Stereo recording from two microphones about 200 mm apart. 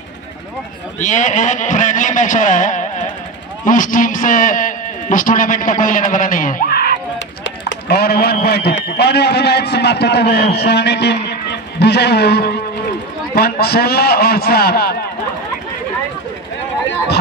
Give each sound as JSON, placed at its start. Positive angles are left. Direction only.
{"t": 1.0, "sound": "a man's voice", "side_deg": 40}